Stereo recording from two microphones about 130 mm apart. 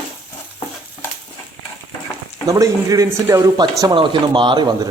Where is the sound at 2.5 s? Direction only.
30° right (ahead or behind).